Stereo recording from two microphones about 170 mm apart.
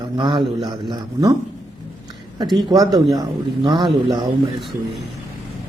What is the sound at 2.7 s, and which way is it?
A man's voice, 20° right (ahead or behind).